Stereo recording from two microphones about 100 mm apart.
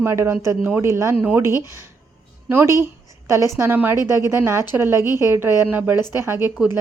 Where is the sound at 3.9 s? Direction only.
40° left (ahead or behind).